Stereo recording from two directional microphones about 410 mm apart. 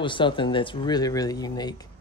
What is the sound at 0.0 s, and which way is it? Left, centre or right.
Speech, centre.